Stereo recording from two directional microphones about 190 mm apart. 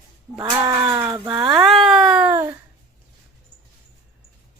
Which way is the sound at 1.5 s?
Centre (ahead or behind).